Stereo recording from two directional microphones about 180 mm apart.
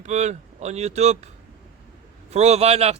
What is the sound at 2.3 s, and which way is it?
Speech, 35° right (ahead or behind).